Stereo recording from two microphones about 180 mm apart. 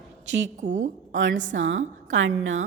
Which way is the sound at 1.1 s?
90° right.